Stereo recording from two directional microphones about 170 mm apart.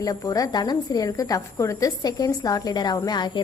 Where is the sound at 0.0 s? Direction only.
20° left (ahead or behind).